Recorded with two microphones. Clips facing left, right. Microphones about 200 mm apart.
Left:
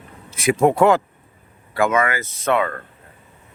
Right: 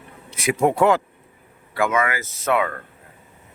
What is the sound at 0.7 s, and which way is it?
Speech, 30° left (ahead or behind).